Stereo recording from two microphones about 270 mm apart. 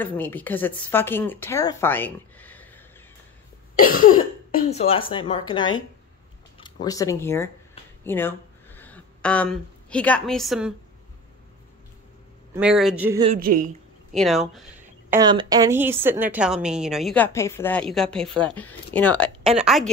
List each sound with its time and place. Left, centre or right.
0.0 s speech: centre
3.7 s cough: left
4.6 s speech: left; by 10.7 s centre
12.5 s a woman's voice: centre
13.4 s a woman's voice: right
14.1 s a woman's voice: centre
15.0 s a woman's voice: centre